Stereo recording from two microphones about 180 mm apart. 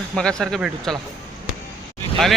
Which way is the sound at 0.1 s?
5° left (ahead or behind).